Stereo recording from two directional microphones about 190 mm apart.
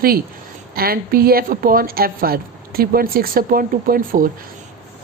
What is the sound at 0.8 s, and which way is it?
Speech, 50° right (ahead or behind).